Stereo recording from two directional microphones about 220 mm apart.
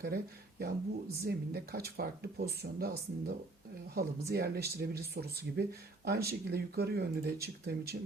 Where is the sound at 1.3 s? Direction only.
45° right (ahead or behind).